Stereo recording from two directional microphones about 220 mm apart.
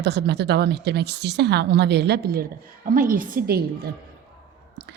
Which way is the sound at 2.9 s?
40° right (ahead or behind).